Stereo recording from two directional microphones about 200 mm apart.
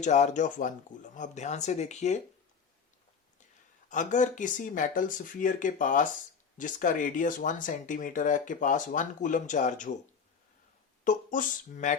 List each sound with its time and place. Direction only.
0.0 s speech: 35° left (ahead or behind)
3.8 s speech: 40° left (ahead or behind)
11.0 s speech: 40° left (ahead or behind)